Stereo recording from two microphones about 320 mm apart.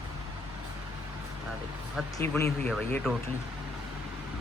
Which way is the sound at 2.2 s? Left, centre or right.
Centre.